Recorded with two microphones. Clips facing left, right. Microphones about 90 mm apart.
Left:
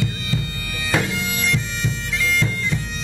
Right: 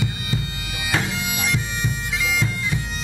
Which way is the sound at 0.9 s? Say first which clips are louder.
Left 2 dB; 15° right (ahead or behind).